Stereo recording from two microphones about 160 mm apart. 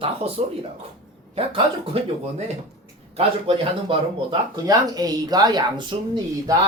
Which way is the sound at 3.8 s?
25° right (ahead or behind).